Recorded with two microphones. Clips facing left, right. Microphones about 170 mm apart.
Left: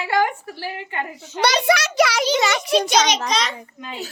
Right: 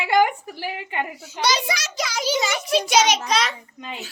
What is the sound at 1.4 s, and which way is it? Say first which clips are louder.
A child's voice: left 6 dB; 60° left (ahead or behind).